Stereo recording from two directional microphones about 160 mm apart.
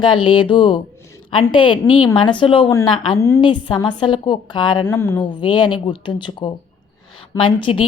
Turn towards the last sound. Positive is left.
turn(degrees=30)  # may be behind; listen again after turning